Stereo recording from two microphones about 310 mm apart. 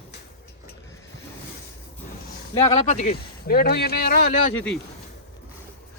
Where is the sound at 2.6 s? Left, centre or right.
Centre.